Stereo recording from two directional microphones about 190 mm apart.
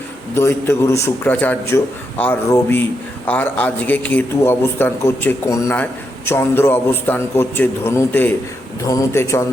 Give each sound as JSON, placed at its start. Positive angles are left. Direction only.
{"t": 0.3, "sound": "a man's voice", "side_deg": 10}